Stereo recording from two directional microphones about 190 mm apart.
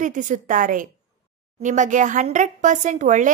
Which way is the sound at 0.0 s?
40° right (ahead or behind).